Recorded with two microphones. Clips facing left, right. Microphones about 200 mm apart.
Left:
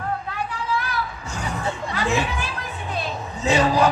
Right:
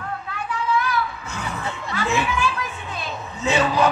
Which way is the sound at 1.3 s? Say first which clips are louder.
Left 2 dB; 40° left (ahead or behind).